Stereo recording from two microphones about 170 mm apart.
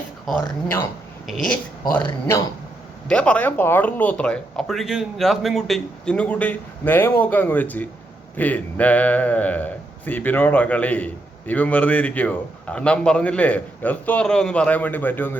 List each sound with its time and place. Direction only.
1.3 s a woman's voice: 5° left (ahead or behind)
2.2 s a man's voice: 15° left (ahead or behind)